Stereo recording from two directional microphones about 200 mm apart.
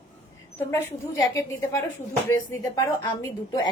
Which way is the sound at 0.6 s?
15° left (ahead or behind).